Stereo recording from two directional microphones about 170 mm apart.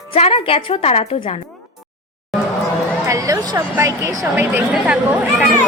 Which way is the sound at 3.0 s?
20° right (ahead or behind).